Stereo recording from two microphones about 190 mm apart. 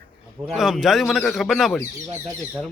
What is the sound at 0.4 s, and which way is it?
Speech, centre (ahead or behind).